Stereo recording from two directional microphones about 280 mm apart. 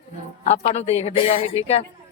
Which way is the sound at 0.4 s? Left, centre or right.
Left.